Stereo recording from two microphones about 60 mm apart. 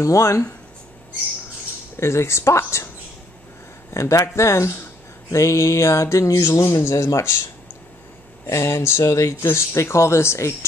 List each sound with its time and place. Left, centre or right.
0.0 s speech: left
2.0 s speech: left
3.9 s speech: left
8.5 s speech: left